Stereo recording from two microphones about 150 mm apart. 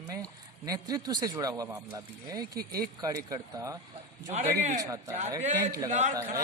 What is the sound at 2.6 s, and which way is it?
Speech, 90° right.